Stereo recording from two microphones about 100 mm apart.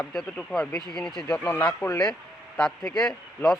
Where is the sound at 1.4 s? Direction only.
15° left (ahead or behind).